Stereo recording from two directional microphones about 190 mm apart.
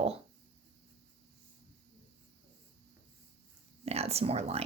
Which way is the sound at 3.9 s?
30° right (ahead or behind).